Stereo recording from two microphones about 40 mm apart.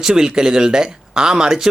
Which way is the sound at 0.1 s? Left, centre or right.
Centre.